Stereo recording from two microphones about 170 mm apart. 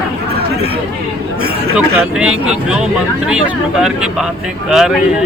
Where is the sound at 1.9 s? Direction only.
5° right (ahead or behind).